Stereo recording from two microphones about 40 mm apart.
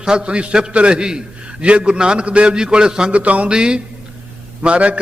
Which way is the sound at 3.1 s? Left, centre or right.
Right.